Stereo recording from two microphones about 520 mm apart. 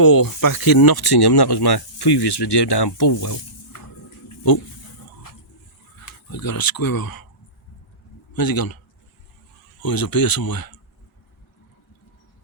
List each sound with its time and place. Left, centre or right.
0.0 s speech: left
6.1 s speech: left
8.3 s a man's voice: left
9.8 s speech: left